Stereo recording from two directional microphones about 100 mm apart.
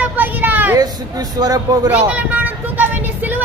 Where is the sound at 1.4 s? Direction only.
40° right (ahead or behind).